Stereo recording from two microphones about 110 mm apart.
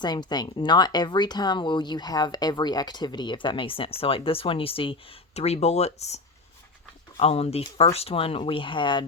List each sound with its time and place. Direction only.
0.0 s speech: 40° left (ahead or behind); by 6.2 s 80° left
7.2 s speech: 65° left (ahead or behind); by 9.0 s 45° left (ahead or behind)